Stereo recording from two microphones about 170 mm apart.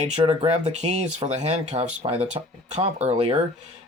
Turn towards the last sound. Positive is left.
turn(degrees=-40)  # may be behind; listen again after turning